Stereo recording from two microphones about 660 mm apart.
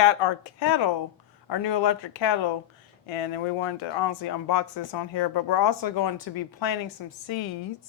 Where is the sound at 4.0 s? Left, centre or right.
Left.